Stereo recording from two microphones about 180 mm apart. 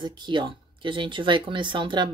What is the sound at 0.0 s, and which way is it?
A woman's voice, 25° right (ahead or behind).